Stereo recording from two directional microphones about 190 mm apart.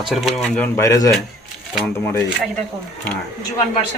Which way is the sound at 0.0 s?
Centre (ahead or behind).